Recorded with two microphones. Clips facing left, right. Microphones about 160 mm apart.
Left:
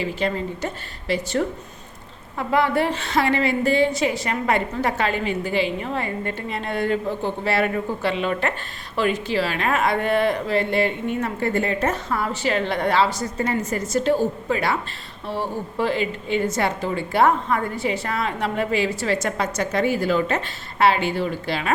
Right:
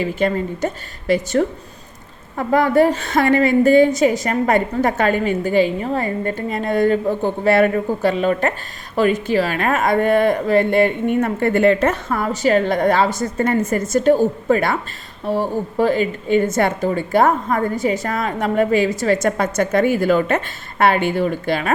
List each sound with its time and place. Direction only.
0.0 s a woman's voice: 45° right (ahead or behind); by 11.9 s 75° right (ahead or behind)
12.0 s a woman's voice: 45° right (ahead or behind)